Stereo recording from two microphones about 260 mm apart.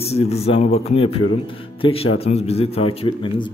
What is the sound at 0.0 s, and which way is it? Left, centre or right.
Speech, left.